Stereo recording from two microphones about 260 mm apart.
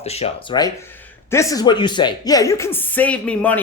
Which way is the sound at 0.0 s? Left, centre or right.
Left.